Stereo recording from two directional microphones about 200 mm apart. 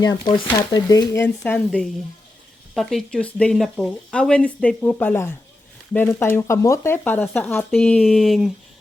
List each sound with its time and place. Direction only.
0.0 s speech: 20° left (ahead or behind); by 8.5 s centre (ahead or behind)